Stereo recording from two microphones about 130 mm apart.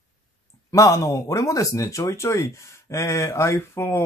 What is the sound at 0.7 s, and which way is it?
Speech, 25° left (ahead or behind).